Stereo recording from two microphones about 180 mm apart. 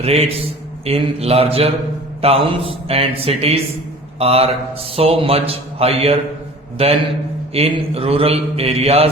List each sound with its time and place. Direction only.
0.0 s a man's voice: 35° right (ahead or behind)